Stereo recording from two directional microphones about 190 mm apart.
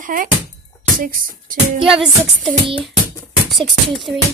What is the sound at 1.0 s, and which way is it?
Music, 45° right (ahead or behind).